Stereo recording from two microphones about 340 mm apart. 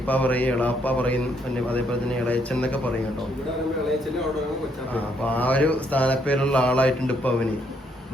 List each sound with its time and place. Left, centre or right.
0.1 s mantra: centre
5.3 s mantra: centre